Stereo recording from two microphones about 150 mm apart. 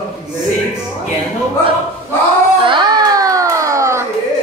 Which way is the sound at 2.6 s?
30° right (ahead or behind).